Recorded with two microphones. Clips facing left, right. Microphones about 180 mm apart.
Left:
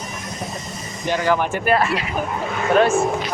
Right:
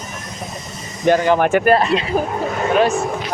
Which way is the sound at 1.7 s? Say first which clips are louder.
Right 4 dB; 25° right (ahead or behind).